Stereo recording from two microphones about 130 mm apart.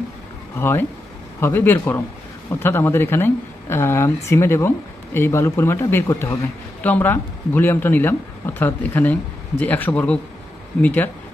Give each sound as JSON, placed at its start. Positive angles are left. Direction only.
{"t": 0.6, "sound": "speech", "side_deg": 20}